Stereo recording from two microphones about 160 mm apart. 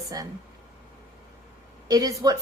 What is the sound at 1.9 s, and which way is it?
Speech, 25° right (ahead or behind).